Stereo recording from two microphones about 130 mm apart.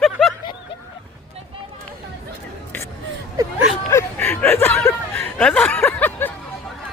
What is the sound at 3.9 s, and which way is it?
Chuckle, 15° left (ahead or behind).